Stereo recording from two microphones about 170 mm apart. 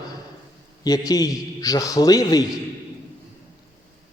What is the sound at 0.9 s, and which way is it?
A man's voice, 20° left (ahead or behind).